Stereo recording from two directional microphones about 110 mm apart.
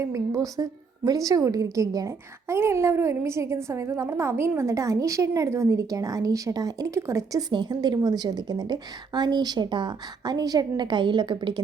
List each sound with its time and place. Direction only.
0.0 s a woman's voice: 30° right (ahead or behind)
7.5 s a woman's voice: 40° right (ahead or behind)